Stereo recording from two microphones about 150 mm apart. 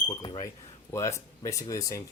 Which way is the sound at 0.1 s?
30° left (ahead or behind).